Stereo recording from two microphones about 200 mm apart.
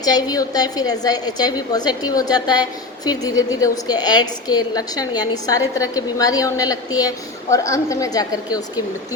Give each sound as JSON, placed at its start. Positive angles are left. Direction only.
{"t": 0.0, "sound": "a woman's voice", "side_deg": 20}